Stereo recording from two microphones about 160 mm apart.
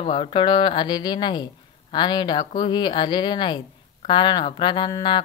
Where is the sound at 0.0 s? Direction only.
35° left (ahead or behind).